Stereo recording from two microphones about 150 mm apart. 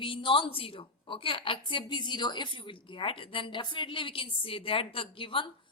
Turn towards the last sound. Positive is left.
turn(degrees=35)  # may be behind; listen again after turning